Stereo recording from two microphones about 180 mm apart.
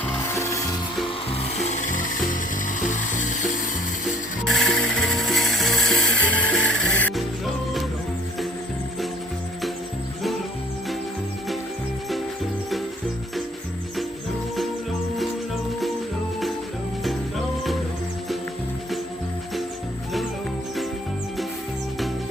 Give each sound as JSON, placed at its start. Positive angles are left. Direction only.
{"t": 0.3, "sound": "music", "side_deg": 15}
{"t": 1.0, "sound": "wood", "side_deg": 35}
{"t": 4.4, "sound": "music", "side_deg": 0}
{"t": 17.0, "sound": "music", "side_deg": 0}